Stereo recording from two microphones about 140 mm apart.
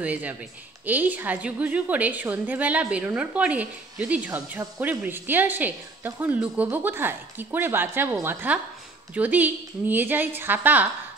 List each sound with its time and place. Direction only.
0.0 s a woman's voice: 10° right (ahead or behind)